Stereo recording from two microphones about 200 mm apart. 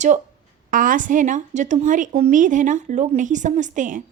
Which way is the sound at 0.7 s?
40° right (ahead or behind).